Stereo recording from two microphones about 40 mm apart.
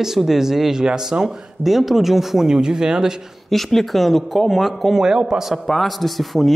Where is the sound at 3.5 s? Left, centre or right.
Centre.